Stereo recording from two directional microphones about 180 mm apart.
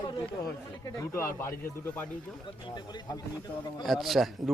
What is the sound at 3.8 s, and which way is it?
Speech, centre (ahead or behind).